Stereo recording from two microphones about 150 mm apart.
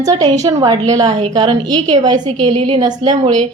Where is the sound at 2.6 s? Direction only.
35° right (ahead or behind).